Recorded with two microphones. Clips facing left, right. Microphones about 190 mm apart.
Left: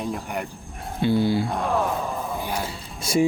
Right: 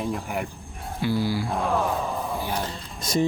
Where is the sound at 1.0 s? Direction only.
25° left (ahead or behind).